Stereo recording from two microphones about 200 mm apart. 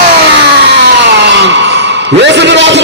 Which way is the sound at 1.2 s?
60° right (ahead or behind).